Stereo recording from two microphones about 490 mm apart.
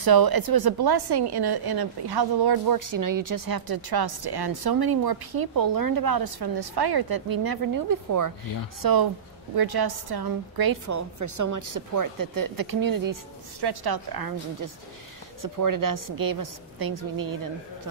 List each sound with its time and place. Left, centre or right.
0.0 s a woman's voice: right